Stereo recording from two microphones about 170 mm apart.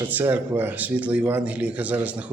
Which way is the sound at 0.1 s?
10° right (ahead or behind).